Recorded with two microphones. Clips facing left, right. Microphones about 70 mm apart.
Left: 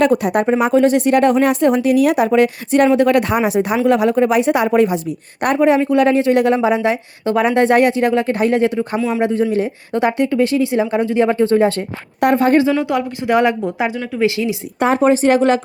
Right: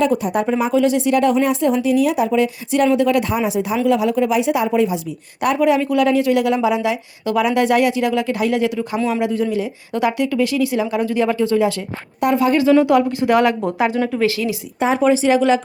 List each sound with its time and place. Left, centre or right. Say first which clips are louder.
0.0 s speech: left 3 dB; left
5.5 s a woman's voice: left 3 dB; left
9.0 s speech: right 1 dB; centre
9.2 s a woman's voice: left 3 dB; left
12.8 s speech: right 4 dB; left
14.9 s speech: left 2 dB; left